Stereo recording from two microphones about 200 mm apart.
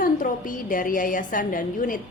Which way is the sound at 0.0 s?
45° left (ahead or behind).